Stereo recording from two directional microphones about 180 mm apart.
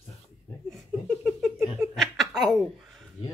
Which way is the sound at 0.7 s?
Centre (ahead or behind).